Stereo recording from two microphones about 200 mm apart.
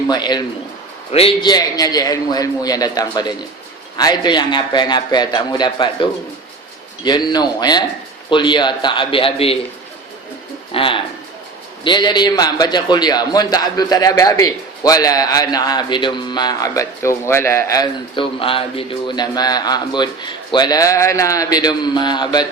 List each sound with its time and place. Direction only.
0.1 s a man's voice: 20° left (ahead or behind)
10.8 s a man's voice: 25° left (ahead or behind)